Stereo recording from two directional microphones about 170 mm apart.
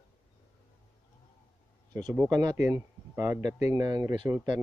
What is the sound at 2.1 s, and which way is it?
Speech, 20° right (ahead or behind).